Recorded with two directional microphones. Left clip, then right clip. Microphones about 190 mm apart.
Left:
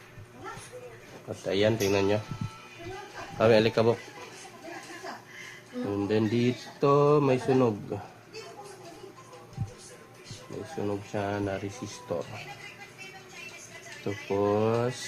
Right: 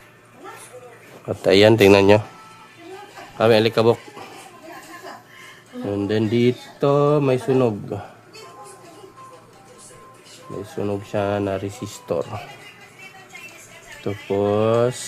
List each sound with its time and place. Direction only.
1.5 s speech: 60° right (ahead or behind)
3.3 s a man's voice: 25° right (ahead or behind)
5.9 s speech: 45° right (ahead or behind)
10.8 s speech: 55° right (ahead or behind)
14.0 s speech: 40° right (ahead or behind)